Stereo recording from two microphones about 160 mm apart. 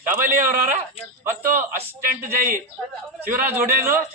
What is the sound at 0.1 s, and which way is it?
Speech, 60° right (ahead or behind).